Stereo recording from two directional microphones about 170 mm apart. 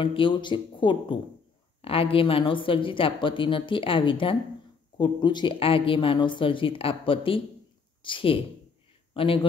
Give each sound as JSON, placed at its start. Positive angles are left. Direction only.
{"t": 0.0, "sound": "a woman's voice", "side_deg": 30}